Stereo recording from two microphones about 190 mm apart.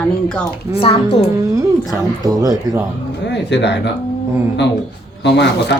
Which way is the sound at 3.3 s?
65° left (ahead or behind).